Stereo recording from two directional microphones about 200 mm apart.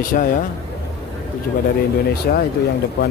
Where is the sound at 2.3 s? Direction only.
50° left (ahead or behind).